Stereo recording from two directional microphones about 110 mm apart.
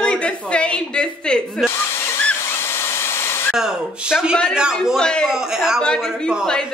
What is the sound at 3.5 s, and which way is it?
Speech, 5° right (ahead or behind).